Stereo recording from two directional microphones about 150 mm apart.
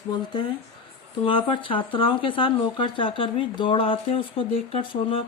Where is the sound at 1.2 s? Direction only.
35° left (ahead or behind).